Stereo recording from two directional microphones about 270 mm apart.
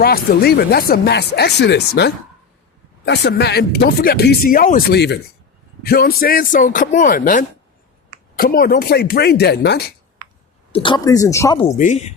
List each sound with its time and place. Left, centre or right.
0.0 s speech: left
10.7 s speech: centre
11.8 s speech: left